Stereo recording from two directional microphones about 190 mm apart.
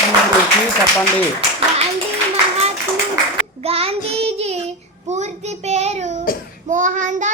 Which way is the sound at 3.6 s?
30° right (ahead or behind).